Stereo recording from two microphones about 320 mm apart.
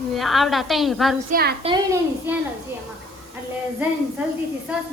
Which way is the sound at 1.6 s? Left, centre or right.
Centre.